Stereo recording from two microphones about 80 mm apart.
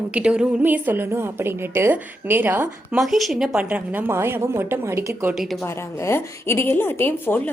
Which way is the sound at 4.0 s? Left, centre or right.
Right.